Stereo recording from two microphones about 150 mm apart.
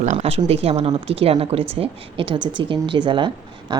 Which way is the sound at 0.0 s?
50° right (ahead or behind).